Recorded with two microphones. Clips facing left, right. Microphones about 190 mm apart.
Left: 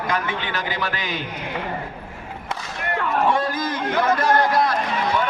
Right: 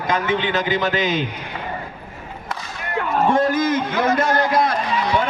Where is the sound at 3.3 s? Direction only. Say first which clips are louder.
Right 5 dB; 50° right (ahead or behind).